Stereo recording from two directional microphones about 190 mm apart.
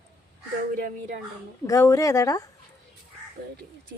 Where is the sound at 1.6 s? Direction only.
15° left (ahead or behind).